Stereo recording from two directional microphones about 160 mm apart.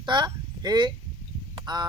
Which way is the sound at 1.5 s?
25° right (ahead or behind).